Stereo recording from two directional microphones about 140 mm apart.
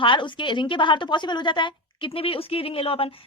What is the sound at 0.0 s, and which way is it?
A woman's voice, 35° left (ahead or behind).